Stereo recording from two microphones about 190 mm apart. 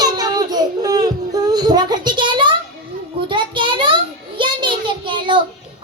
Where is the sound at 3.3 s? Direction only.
25° right (ahead or behind).